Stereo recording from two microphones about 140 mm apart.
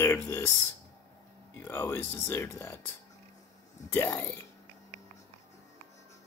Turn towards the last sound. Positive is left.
turn(degrees=20)  # may be behind; listen again after turning